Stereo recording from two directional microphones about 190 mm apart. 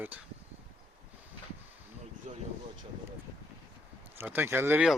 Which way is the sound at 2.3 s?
35° right (ahead or behind).